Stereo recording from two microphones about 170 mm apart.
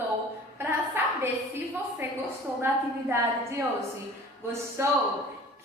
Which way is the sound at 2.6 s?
15° right (ahead or behind).